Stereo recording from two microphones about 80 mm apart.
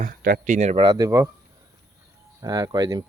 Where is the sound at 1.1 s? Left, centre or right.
Right.